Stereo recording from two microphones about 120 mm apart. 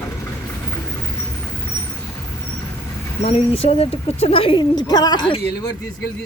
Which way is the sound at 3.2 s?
60° left (ahead or behind).